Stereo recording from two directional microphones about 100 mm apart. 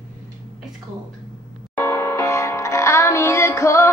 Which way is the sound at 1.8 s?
25° left (ahead or behind).